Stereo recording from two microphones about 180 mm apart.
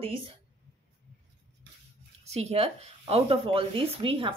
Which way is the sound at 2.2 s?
35° right (ahead or behind).